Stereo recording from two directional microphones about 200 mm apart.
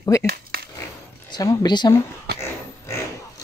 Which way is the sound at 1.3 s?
20° left (ahead or behind).